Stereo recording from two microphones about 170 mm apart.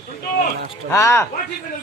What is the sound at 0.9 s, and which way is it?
Speech, 15° left (ahead or behind).